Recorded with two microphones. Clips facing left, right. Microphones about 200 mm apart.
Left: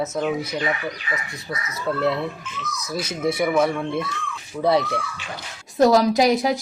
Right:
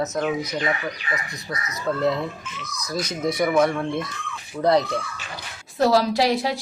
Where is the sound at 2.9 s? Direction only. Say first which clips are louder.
Left 1 dB; 5° left (ahead or behind).